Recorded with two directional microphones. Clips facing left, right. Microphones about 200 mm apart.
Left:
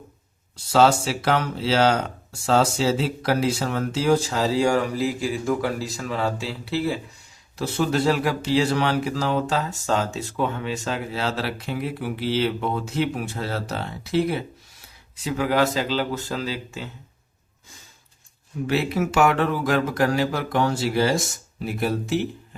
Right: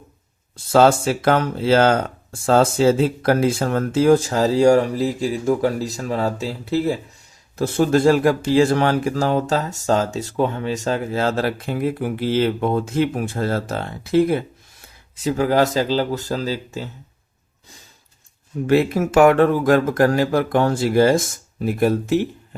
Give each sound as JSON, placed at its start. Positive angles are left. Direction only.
{"t": 0.5, "sound": "speech", "side_deg": -50}
{"t": 18.7, "sound": "speech", "side_deg": -50}